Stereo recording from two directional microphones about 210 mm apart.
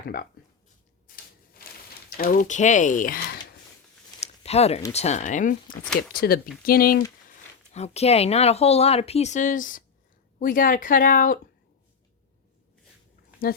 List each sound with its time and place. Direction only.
1.0 s a sound: 45° left (ahead or behind)
2.1 s speech: 40° left (ahead or behind)
4.2 s a sound: 30° left (ahead or behind)
4.9 s speech: 30° left (ahead or behind)
7.3 s speech: 30° left (ahead or behind)
13.4 s speech: 45° left (ahead or behind)